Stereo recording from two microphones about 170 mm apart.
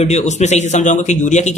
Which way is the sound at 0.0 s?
40° left (ahead or behind).